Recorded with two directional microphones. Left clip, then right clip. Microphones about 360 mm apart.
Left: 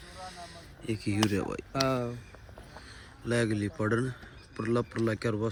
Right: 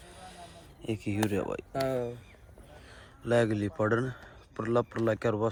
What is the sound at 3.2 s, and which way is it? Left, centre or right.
Speech, centre.